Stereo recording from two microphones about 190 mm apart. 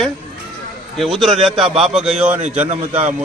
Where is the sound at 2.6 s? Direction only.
35° right (ahead or behind).